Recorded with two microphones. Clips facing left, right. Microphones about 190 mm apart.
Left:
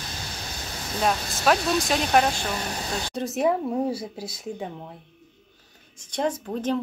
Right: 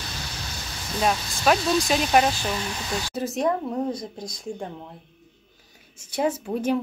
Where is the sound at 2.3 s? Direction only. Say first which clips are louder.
Right 1 dB; 50° left (ahead or behind).